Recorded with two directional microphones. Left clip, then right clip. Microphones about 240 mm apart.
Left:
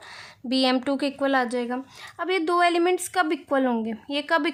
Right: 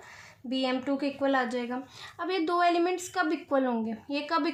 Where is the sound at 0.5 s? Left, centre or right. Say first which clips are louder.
Left 7 dB; left.